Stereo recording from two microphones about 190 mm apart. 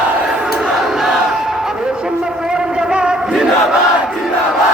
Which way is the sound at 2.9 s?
5° right (ahead or behind).